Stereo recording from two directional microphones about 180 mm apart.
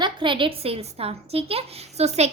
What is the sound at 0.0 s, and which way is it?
A child's voice, 25° right (ahead or behind).